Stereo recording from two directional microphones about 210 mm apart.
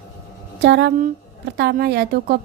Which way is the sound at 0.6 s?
55° right (ahead or behind).